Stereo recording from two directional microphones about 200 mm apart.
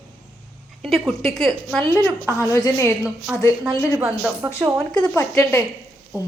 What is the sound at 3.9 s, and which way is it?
Speech, 5° right (ahead or behind).